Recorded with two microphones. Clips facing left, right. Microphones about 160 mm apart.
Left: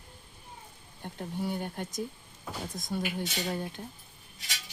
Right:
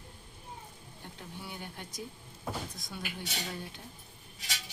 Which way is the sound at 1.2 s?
45° left (ahead or behind).